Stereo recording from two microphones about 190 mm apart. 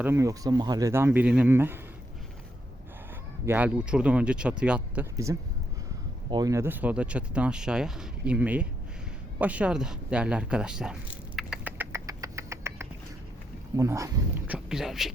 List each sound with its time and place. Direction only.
0.0 s speech: 15° right (ahead or behind)
3.4 s speech: 10° right (ahead or behind)
5.1 s speech: 15° right (ahead or behind)
11.3 s rodents: 5° right (ahead or behind)
13.7 s speech: 15° right (ahead or behind); by 15.1 s centre (ahead or behind)